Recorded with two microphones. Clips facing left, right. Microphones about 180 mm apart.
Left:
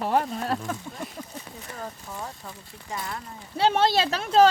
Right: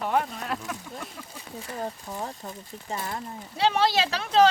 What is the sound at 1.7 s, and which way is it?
Speech, 25° right (ahead or behind).